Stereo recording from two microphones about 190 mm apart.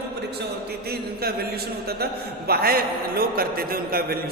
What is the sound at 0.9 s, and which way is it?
Speech, 55° right (ahead or behind).